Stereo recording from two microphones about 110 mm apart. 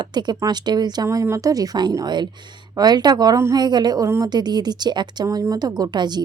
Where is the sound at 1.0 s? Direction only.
25° right (ahead or behind).